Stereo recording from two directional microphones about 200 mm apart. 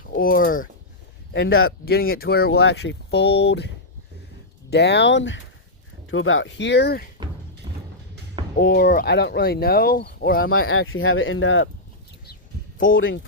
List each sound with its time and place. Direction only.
0.0 s speech: 45° left (ahead or behind)
1.3 s speech: 80° left
1.8 s speech: 50° left (ahead or behind)
4.7 s speech: 60° left (ahead or behind)
6.1 s speech: 80° left; by 7.0 s 55° left (ahead or behind)
7.2 s a sound: 20° right (ahead or behind)
8.5 s speech: 50° left (ahead or behind)
10.7 s speech: 85° left
12.9 s speech: 75° left (ahead or behind)